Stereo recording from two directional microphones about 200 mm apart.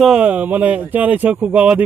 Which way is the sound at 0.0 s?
5° right (ahead or behind).